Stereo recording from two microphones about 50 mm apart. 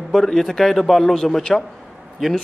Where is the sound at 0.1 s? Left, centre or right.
Centre.